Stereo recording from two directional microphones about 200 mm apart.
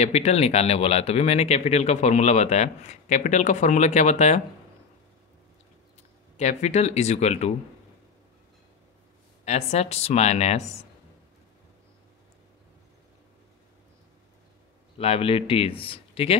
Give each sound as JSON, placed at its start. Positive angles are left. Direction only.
{"t": 0.0, "sound": "speech", "side_deg": 35}
{"t": 6.3, "sound": "speech", "side_deg": 35}
{"t": 9.4, "sound": "speech", "side_deg": 35}
{"t": 15.0, "sound": "speech", "side_deg": 30}